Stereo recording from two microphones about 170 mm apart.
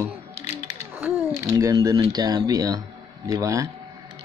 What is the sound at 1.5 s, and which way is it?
Speech, 20° right (ahead or behind).